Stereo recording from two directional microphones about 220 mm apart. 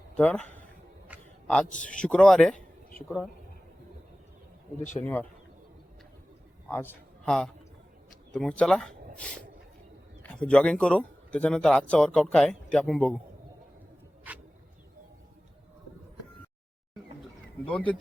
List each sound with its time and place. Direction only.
0.1 s speech: 5° left (ahead or behind)
1.8 s speech: 5° left (ahead or behind)
4.8 s speech: 35° left (ahead or behind)
6.7 s a man's voice: 5° left (ahead or behind)
17.7 s speech: 5° left (ahead or behind)